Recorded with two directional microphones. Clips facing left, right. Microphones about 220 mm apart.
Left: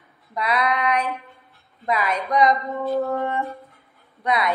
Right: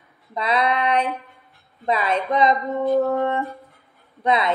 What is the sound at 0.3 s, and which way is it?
A woman's voice, 25° right (ahead or behind).